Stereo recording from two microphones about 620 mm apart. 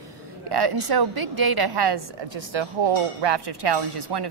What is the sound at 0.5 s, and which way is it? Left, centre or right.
A woman's voice, right.